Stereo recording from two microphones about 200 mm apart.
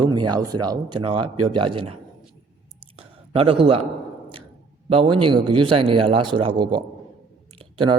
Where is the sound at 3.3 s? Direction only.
25° right (ahead or behind).